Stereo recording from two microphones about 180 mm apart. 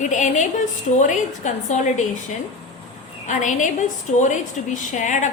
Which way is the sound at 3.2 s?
45° left (ahead or behind).